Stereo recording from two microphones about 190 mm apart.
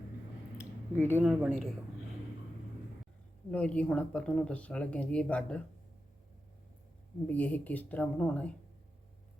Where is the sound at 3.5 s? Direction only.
5° left (ahead or behind).